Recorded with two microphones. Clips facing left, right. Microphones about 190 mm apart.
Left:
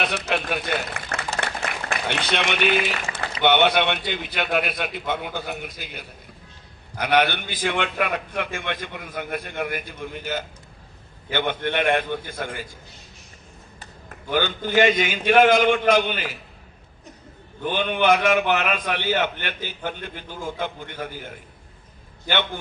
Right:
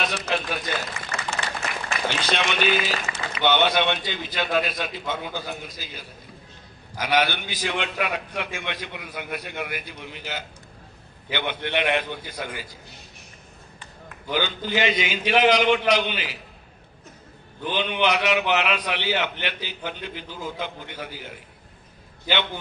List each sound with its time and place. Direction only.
0.0 s a man's voice: 60° left (ahead or behind)
14.3 s a man's voice: 50° left (ahead or behind)
17.6 s a man's voice: 50° left (ahead or behind)